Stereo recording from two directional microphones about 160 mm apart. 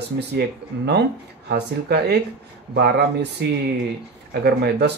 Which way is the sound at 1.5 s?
90° right.